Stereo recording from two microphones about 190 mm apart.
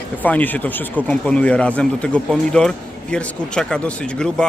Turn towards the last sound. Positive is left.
turn(degrees=5)  # may be behind; listen again after turning